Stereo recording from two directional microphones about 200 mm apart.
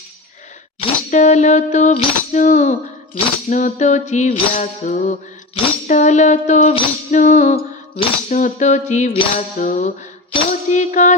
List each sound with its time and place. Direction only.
1.1 s music: 35° left (ahead or behind)